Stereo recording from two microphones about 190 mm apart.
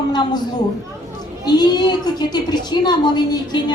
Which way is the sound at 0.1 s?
20° left (ahead or behind).